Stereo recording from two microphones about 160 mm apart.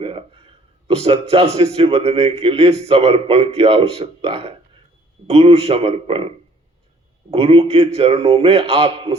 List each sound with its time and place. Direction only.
0.0 s a man's voice: 35° right (ahead or behind)
7.3 s a man's voice: 40° right (ahead or behind)